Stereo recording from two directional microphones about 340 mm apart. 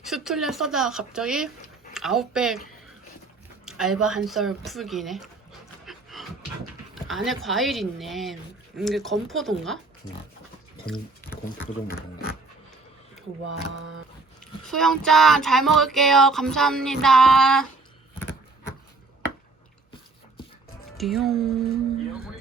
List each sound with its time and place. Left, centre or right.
0.0 s child singing: centre
1.9 s speech: centre
3.7 s child singing: centre
5.8 s pant: centre
6.9 s child singing: centre
11.5 s speech: left
14.6 s child singing: centre
21.0 s child singing: centre